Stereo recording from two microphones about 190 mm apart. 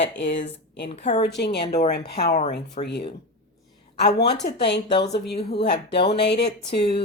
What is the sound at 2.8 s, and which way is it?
Speech, 60° left (ahead or behind).